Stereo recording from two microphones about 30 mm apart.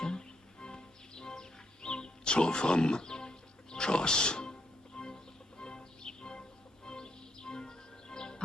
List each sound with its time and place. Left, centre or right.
0.0 s music: left